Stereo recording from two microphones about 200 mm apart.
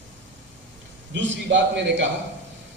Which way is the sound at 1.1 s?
65° right (ahead or behind).